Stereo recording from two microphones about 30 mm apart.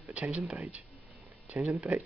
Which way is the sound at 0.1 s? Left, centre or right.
Right.